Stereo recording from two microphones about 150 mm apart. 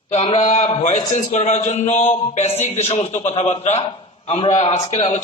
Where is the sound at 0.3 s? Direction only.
45° left (ahead or behind).